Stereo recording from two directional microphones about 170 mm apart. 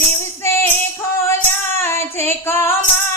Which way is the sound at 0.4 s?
15° left (ahead or behind).